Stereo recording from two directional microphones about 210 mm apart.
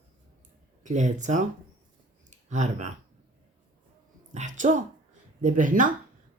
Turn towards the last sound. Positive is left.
turn(degrees=-40)  # may be behind; listen again after turning